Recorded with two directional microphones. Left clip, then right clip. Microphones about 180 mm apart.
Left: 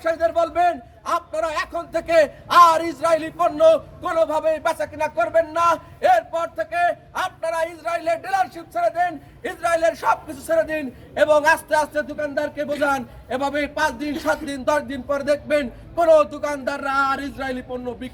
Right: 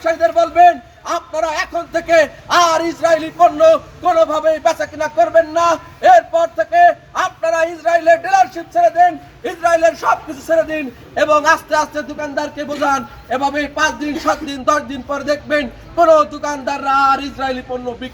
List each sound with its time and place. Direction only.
0.0 s a man's voice: 20° left (ahead or behind)